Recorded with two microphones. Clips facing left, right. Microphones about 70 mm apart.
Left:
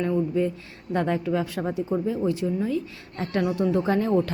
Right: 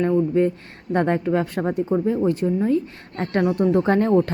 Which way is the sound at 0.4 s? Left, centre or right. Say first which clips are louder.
Right 5 dB; right.